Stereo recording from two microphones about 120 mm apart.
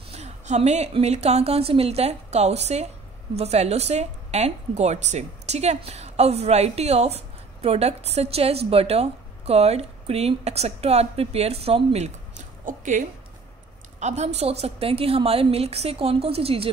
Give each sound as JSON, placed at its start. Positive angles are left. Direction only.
{"t": 0.1, "sound": "a woman's voice", "side_deg": -65}
{"t": 13.9, "sound": "a woman's voice", "side_deg": -70}